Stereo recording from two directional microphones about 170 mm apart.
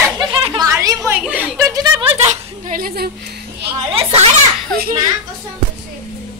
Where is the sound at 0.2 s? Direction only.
30° right (ahead or behind).